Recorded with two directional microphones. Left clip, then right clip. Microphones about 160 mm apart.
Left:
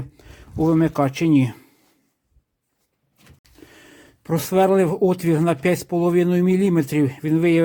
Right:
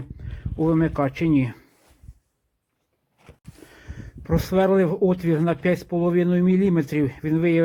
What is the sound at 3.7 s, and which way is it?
Speech, 25° left (ahead or behind).